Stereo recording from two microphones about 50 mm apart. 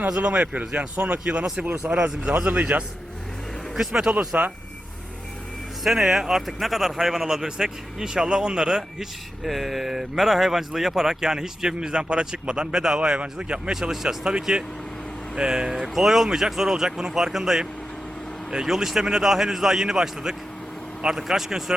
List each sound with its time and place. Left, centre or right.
0.1 s speech: right
2.5 s speech: right
3.8 s speech: centre
4.3 s speech: right
5.8 s speech: centre
13.7 s speech: centre
15.4 s speech: centre